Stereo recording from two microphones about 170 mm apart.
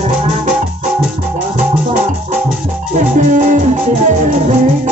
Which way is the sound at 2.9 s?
45° right (ahead or behind).